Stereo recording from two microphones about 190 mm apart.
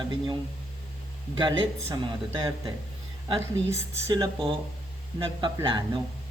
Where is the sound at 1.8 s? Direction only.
20° right (ahead or behind).